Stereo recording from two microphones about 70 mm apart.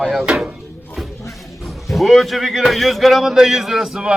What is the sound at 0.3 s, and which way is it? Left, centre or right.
Speech, centre.